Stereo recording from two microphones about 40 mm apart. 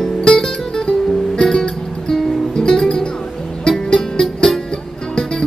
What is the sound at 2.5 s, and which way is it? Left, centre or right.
Music, centre.